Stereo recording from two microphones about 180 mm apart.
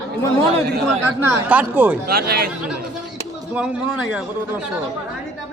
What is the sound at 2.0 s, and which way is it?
Speech, 60° right (ahead or behind).